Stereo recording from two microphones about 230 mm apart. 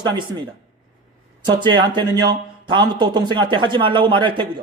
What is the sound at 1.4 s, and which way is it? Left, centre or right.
Speech, centre.